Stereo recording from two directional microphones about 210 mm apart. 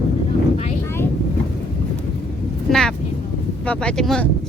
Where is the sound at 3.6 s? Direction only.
5° left (ahead or behind).